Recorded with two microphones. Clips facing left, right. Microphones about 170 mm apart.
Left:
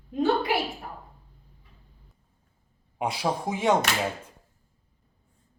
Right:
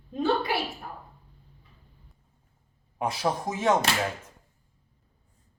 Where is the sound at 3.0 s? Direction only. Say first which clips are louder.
Even; 10° left (ahead or behind).